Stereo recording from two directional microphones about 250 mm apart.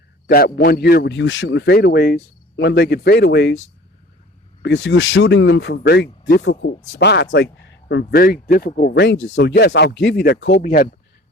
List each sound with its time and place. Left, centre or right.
0.3 s a man's voice: left
4.6 s a man's voice: left